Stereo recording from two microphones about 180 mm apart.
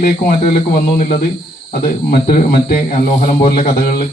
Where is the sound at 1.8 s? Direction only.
55° left (ahead or behind).